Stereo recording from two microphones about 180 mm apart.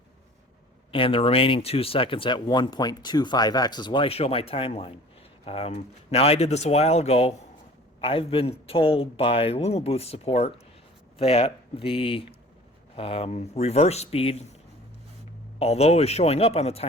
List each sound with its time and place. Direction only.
0.9 s a man's voice: 30° left (ahead or behind)
15.5 s a man's voice: 35° left (ahead or behind)